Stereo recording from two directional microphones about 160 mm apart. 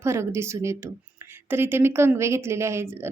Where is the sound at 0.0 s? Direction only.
15° right (ahead or behind).